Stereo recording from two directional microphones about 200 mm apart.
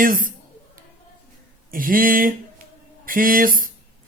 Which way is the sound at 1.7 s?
45° right (ahead or behind).